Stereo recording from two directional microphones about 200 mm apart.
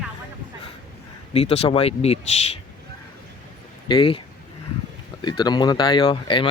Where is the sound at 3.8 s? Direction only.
25° left (ahead or behind).